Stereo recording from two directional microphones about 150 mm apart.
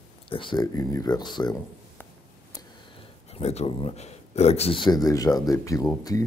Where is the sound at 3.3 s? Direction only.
45° left (ahead or behind).